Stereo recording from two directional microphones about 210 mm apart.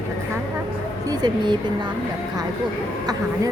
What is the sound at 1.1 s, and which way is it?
Speech, 20° right (ahead or behind).